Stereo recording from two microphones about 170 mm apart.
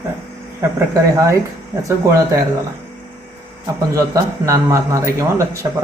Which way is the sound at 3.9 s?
20° right (ahead or behind).